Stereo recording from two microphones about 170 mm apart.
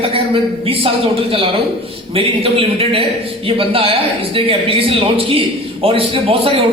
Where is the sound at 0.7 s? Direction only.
35° right (ahead or behind).